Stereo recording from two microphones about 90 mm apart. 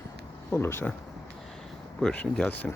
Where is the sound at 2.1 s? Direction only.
10° left (ahead or behind).